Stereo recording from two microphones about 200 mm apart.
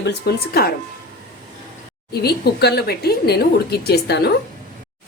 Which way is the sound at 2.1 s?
55° left (ahead or behind).